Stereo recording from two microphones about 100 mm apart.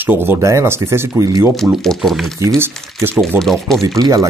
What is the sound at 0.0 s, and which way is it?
Speech, 20° right (ahead or behind).